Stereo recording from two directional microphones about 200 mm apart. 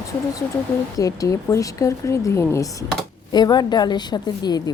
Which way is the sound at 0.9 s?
15° left (ahead or behind).